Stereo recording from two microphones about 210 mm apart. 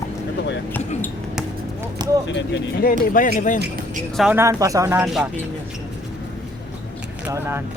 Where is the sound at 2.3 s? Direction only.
60° left (ahead or behind); by 3.5 s 40° left (ahead or behind).